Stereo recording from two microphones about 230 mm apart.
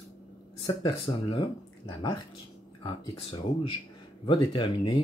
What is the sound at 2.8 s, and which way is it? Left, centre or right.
Speech, centre.